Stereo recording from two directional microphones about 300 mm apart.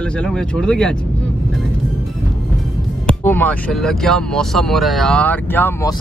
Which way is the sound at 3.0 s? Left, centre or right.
Centre.